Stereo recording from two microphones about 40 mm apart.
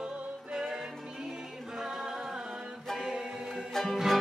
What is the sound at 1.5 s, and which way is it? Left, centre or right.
A capella, centre.